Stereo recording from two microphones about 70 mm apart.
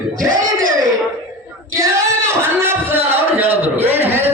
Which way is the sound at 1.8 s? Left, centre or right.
Right.